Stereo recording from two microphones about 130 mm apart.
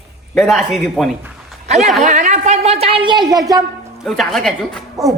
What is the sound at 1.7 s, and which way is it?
Speech, 60° right (ahead or behind).